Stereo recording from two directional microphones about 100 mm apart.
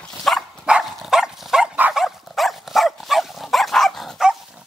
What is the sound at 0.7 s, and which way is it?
Dog, 5° right (ahead or behind).